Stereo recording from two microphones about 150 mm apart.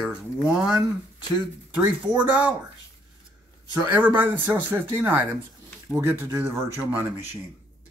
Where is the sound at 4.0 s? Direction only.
10° right (ahead or behind).